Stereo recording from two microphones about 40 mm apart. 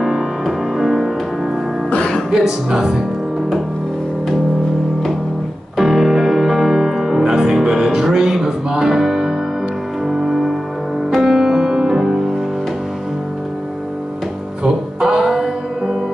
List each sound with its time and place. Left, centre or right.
0.0 s music: centre
2.3 s music: centre
5.8 s music: centre
15.0 s music: centre